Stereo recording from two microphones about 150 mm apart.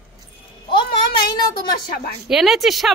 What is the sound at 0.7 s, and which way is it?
A child's voice, 30° left (ahead or behind).